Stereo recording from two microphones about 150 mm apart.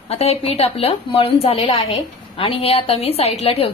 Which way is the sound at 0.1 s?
45° left (ahead or behind).